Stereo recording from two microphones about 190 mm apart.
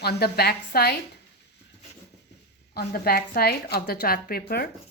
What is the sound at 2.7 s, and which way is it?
A woman's voice, 55° left (ahead or behind).